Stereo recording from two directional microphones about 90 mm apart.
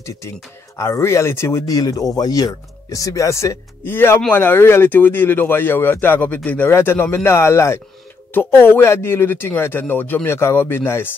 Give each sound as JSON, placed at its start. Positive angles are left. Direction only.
{"t": 0.7, "sound": "speech", "side_deg": 30}
{"t": 1.8, "sound": "speech", "side_deg": 40}
{"t": 3.8, "sound": "speech", "side_deg": 25}